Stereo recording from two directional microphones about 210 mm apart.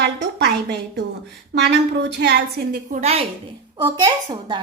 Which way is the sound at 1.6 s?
55° right (ahead or behind).